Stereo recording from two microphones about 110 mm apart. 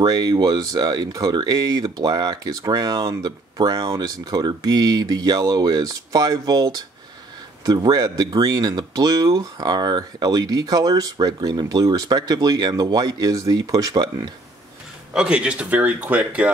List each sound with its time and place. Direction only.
0.0 s speech: 40° right (ahead or behind)
15.1 s speech: 10° right (ahead or behind)